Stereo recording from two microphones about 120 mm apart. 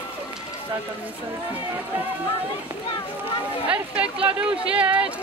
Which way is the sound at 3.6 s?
10° right (ahead or behind).